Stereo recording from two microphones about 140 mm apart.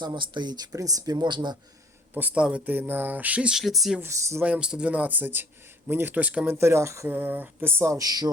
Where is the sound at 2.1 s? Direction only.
10° right (ahead or behind).